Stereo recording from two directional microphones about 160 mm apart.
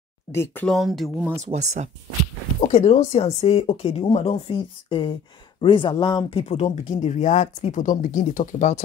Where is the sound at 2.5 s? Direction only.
45° left (ahead or behind).